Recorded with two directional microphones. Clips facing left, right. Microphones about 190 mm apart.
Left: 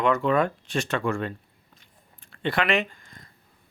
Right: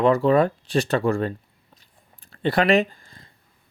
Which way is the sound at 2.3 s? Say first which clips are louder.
Right 6 dB; 35° right (ahead or behind).